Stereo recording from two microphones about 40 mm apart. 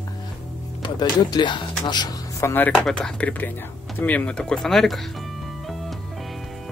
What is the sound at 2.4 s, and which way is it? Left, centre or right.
Speech, left.